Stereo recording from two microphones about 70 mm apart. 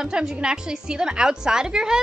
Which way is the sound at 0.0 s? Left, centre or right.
Centre.